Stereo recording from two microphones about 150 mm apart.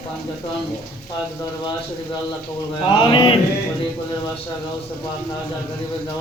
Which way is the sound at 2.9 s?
35° left (ahead or behind).